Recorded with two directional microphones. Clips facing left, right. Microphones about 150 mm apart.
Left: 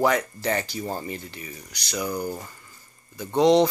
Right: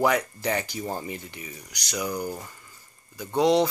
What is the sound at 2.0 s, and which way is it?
Speech, 5° left (ahead or behind).